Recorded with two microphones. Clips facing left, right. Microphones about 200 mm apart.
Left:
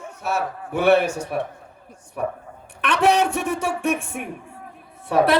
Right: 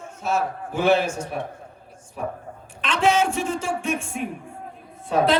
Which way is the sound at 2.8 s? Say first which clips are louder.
Left 2 dB; 65° left (ahead or behind).